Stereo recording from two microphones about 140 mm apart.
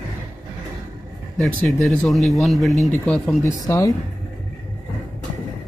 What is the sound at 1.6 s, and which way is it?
Speech, centre (ahead or behind).